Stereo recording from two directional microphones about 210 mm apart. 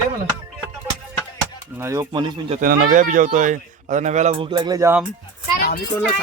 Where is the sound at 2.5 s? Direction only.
40° right (ahead or behind); by 5.0 s 10° right (ahead or behind).